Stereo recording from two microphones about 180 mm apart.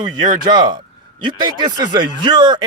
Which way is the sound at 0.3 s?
25° right (ahead or behind).